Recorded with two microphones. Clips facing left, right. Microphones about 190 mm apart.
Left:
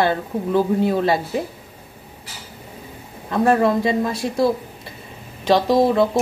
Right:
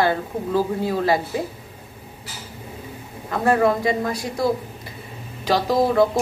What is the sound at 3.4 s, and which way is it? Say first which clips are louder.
Speech: left 2 dB; 25° left (ahead or behind).